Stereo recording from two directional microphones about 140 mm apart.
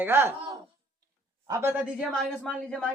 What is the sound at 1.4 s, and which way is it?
Speech, 20° right (ahead or behind).